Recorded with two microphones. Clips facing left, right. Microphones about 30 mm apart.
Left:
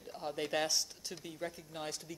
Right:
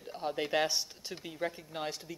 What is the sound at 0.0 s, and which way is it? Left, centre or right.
A woman's voice, centre.